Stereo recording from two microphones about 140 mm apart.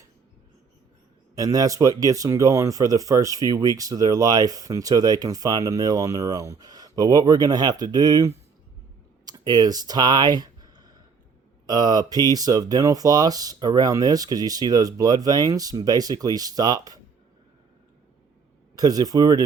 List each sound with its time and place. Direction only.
1.4 s speech: 25° right (ahead or behind)
9.2 s a sound: 30° right (ahead or behind)
11.6 s speech: 30° right (ahead or behind)
18.8 s speech: 25° right (ahead or behind)